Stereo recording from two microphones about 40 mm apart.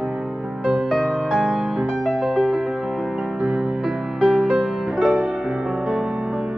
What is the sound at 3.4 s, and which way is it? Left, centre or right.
Music, centre.